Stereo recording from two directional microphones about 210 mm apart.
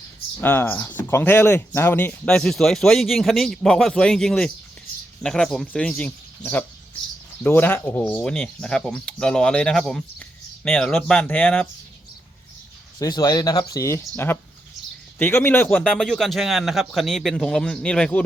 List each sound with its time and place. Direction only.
0.4 s speech: 10° left (ahead or behind)
13.0 s speech: 20° left (ahead or behind)